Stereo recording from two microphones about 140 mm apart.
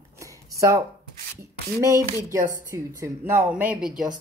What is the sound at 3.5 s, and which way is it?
Speech, 10° right (ahead or behind).